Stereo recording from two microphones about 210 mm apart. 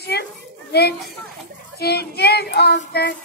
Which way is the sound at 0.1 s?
50° left (ahead or behind).